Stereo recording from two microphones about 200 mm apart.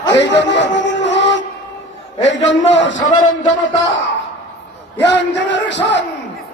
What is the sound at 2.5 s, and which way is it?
Speech, 65° left (ahead or behind).